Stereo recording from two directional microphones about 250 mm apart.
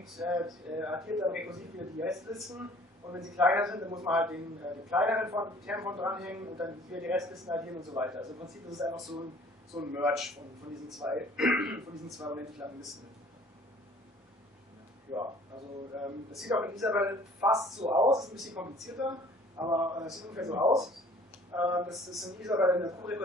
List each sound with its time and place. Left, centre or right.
0.0 s a man's voice: centre
15.9 s a man's voice: centre
18.2 s a man's voice: centre